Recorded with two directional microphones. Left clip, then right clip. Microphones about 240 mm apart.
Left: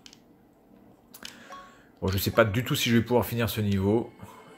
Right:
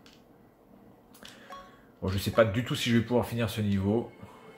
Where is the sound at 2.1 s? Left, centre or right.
Left.